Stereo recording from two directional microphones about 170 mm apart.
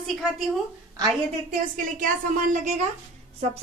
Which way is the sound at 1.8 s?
50° right (ahead or behind).